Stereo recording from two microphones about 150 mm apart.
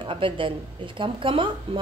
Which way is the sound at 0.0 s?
35° right (ahead or behind).